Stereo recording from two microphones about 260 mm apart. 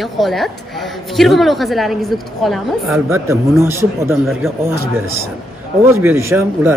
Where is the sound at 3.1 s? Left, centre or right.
Centre.